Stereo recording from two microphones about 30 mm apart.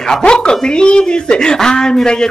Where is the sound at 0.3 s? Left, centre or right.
Left.